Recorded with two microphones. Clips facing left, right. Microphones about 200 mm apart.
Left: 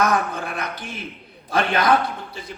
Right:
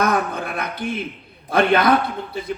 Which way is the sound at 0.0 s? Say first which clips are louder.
Right 1 dB; 55° right (ahead or behind).